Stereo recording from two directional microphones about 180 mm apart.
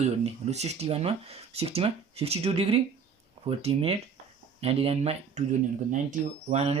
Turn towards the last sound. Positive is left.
turn(degrees=-35)  # may be behind; listen again after turning